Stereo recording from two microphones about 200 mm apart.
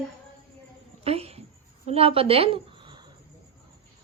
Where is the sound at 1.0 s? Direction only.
30° right (ahead or behind).